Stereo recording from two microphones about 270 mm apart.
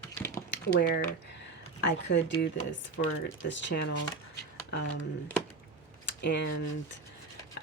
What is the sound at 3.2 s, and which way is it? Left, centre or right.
Speech, left.